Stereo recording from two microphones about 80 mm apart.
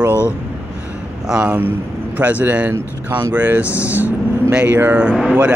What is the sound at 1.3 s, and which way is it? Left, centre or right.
Speech, centre.